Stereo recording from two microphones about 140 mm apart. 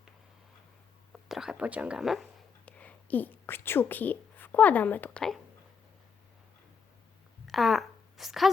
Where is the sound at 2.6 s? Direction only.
10° left (ahead or behind).